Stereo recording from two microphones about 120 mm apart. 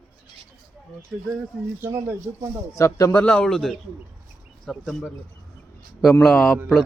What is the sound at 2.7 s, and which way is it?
Speech, 25° left (ahead or behind).